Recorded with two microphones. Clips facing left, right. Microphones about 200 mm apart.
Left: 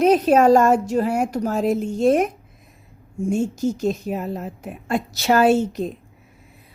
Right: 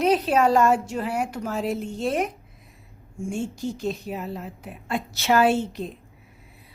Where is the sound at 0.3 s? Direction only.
45° left (ahead or behind).